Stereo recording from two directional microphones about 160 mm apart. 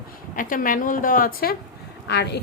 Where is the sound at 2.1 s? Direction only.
90° left.